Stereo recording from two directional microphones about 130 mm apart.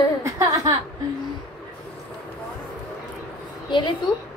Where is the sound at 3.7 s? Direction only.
40° left (ahead or behind).